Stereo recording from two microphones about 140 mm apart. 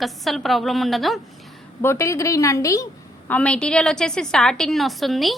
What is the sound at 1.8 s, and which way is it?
A woman's voice, 20° left (ahead or behind).